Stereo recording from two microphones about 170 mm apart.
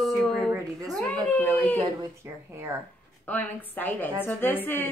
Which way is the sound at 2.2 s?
15° right (ahead or behind).